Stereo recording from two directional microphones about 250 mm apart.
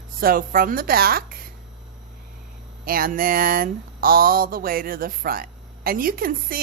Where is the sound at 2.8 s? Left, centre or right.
Right.